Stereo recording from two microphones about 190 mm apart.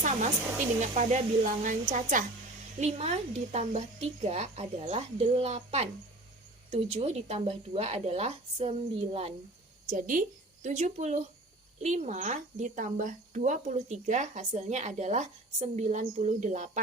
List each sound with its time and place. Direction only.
0.0 s speech: 35° right (ahead or behind)